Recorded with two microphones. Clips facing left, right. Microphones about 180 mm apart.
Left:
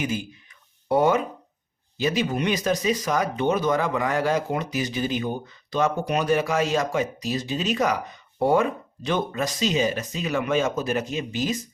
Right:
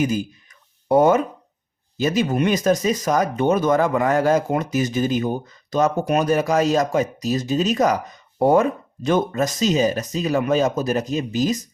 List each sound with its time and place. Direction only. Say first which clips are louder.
0.0 s speech: right 6 dB; 40° right (ahead or behind)